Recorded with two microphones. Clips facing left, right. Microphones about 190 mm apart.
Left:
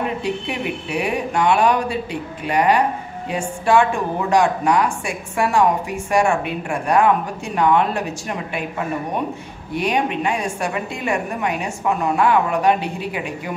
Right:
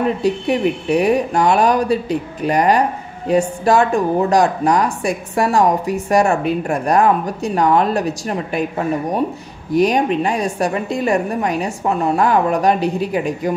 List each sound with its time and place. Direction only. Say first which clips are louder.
0.0 s speech: right 6 dB; 40° right (ahead or behind)